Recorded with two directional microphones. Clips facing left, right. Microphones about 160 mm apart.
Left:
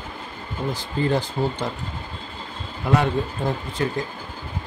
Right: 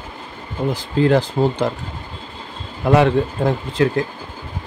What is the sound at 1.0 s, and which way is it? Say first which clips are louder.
Speech: right 7 dB; 90° right.